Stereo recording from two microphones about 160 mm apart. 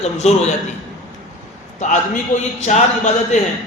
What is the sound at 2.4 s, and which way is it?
A man's voice, 45° left (ahead or behind).